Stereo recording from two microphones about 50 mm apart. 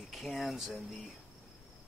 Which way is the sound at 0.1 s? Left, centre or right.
Centre.